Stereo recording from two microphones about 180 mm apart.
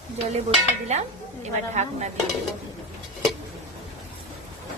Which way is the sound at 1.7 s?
40° right (ahead or behind).